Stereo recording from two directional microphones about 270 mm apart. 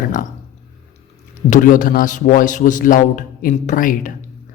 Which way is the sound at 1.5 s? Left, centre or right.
Left.